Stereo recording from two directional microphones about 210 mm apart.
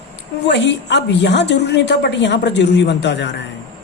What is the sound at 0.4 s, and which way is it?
A woman's voice, 55° left (ahead or behind).